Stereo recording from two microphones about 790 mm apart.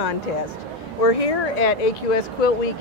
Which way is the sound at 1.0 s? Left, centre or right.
Left.